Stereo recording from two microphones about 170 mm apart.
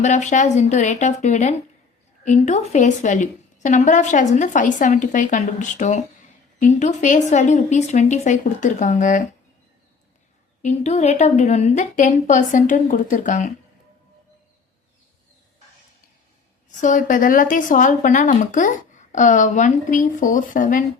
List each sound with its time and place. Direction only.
0.0 s a woman's voice: 45° left (ahead or behind)
10.6 s a woman's voice: 40° left (ahead or behind)
16.8 s a woman's voice: 50° left (ahead or behind)